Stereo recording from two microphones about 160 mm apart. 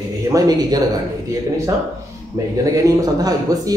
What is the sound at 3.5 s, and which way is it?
Speech, 20° right (ahead or behind).